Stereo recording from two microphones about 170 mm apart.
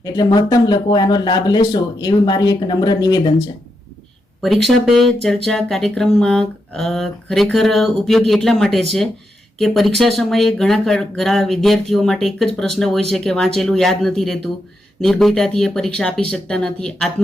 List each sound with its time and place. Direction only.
0.0 s speech: 25° left (ahead or behind)
4.4 s speech: centre (ahead or behind)